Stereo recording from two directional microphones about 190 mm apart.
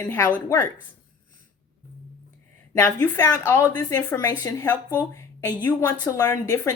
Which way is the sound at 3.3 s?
20° left (ahead or behind).